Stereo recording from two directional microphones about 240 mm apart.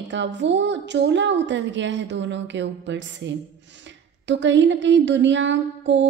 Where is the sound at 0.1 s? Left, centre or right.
Right.